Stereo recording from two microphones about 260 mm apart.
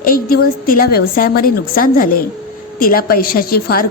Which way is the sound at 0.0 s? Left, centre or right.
Left.